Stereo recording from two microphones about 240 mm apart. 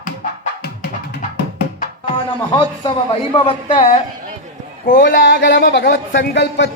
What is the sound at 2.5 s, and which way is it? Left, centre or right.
Speech, left.